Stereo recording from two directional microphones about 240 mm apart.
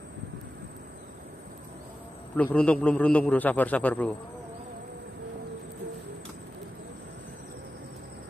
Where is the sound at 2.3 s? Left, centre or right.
Centre.